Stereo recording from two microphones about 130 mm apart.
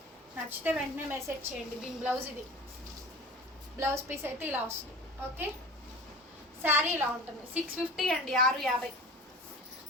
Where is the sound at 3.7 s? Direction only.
20° right (ahead or behind).